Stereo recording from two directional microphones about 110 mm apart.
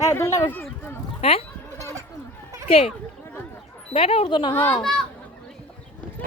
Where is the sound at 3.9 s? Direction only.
65° left (ahead or behind).